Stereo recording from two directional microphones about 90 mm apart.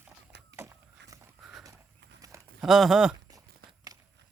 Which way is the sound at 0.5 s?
30° right (ahead or behind).